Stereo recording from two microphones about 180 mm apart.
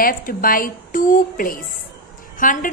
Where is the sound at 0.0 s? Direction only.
55° left (ahead or behind).